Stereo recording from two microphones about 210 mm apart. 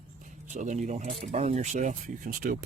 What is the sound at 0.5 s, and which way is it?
Speech, 35° right (ahead or behind).